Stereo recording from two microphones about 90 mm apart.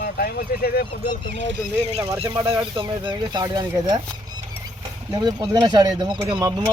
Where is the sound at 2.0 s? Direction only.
35° right (ahead or behind).